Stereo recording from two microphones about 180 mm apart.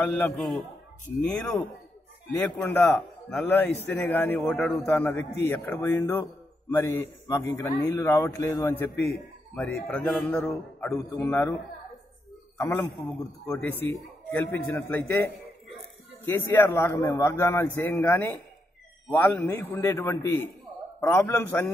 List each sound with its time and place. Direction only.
0.0 s a man's voice: 10° left (ahead or behind)
11.2 s speech: 20° left (ahead or behind)
12.5 s a man's voice: 10° left (ahead or behind)